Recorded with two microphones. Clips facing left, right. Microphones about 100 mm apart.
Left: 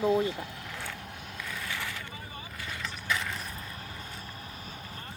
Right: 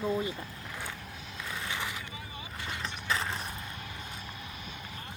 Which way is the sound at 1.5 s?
20° right (ahead or behind).